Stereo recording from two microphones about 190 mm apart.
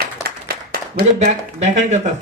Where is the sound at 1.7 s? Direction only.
40° right (ahead or behind).